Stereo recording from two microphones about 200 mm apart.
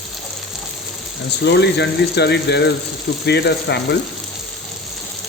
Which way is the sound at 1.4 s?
60° left (ahead or behind).